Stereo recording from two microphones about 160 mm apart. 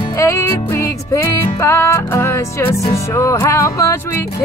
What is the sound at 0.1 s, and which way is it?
Music, 20° left (ahead or behind).